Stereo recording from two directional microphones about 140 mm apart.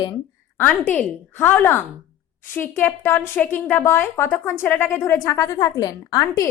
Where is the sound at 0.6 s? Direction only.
15° left (ahead or behind).